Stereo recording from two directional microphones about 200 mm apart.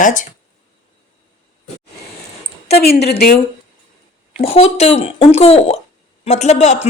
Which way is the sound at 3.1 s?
55° left (ahead or behind).